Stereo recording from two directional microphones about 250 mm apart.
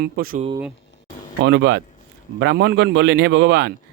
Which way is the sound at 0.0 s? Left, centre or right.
Right.